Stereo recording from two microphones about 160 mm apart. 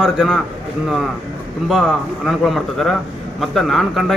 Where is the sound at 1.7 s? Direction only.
Centre (ahead or behind).